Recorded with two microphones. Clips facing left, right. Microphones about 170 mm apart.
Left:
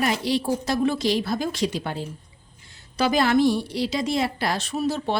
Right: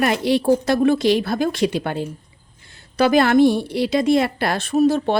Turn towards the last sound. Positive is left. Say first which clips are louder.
# right 8 dB
turn(degrees=-55)  # may be behind; listen again after turning